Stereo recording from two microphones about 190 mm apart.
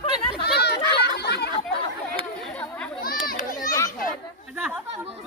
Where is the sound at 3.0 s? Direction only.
50° left (ahead or behind).